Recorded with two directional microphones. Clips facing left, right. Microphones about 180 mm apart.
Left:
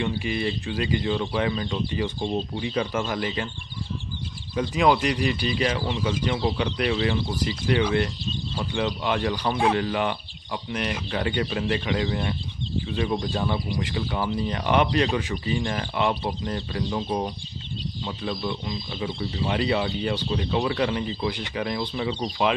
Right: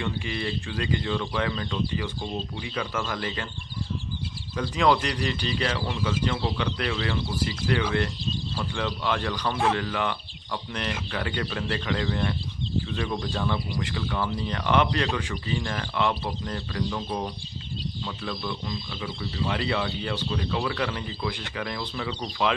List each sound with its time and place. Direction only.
0.0 s speech: 15° left (ahead or behind)
3.2 s speech: 15° left (ahead or behind)
4.6 s speech: 15° left (ahead or behind)